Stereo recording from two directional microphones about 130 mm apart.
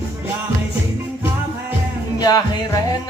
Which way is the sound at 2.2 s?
30° left (ahead or behind).